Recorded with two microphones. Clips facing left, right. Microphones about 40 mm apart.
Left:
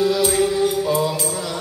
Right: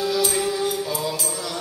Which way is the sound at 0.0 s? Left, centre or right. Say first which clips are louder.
Left 5 dB; centre.